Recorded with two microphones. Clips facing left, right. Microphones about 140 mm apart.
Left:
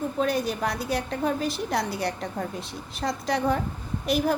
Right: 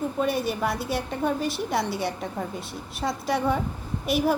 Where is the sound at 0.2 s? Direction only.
Centre (ahead or behind).